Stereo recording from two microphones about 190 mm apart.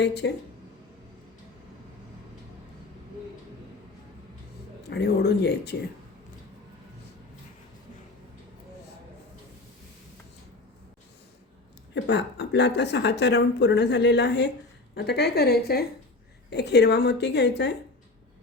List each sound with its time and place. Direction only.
0.0 s a woman's voice: 60° left (ahead or behind)
4.9 s a woman's voice: 60° left (ahead or behind)
11.9 s a woman's voice: 65° left (ahead or behind)